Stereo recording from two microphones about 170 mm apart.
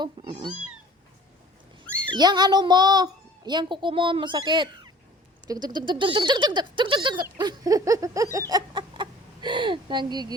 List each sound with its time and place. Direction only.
0.0 s speech: 25° right (ahead or behind)
2.0 s speech: 25° right (ahead or behind)